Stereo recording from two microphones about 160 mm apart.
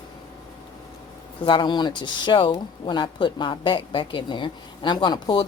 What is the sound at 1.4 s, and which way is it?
Speech, 30° left (ahead or behind).